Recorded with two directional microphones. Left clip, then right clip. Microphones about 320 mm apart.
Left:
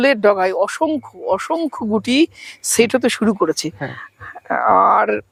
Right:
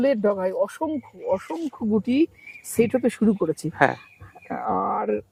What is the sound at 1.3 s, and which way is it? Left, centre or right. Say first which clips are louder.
Speech: left 9 dB; centre.